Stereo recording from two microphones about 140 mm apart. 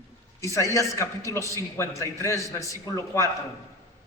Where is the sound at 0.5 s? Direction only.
20° left (ahead or behind).